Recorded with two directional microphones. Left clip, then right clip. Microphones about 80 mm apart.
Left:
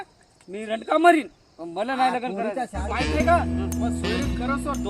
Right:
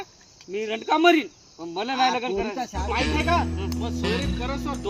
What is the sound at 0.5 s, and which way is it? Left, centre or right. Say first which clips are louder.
Speech: even; left.